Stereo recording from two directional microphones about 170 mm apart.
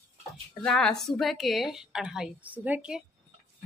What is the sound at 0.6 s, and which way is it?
A woman's voice, centre (ahead or behind).